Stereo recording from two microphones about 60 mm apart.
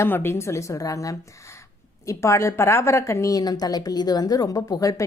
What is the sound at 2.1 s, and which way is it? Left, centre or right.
A woman's voice, left.